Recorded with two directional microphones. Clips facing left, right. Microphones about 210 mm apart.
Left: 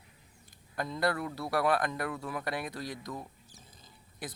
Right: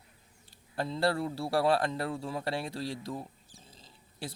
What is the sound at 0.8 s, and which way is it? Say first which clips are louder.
Speech: right 2 dB; 30° right (ahead or behind).